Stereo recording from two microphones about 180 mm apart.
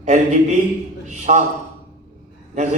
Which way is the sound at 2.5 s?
40° right (ahead or behind).